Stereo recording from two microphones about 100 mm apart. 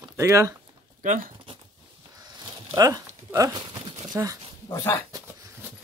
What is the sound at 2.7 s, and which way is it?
Speech, 35° right (ahead or behind).